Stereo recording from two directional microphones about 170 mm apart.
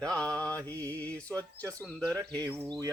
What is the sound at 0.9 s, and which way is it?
Mantra, 10° left (ahead or behind).